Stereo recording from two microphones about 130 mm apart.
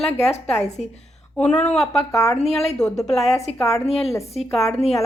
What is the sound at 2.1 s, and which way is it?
Speech, 25° left (ahead or behind).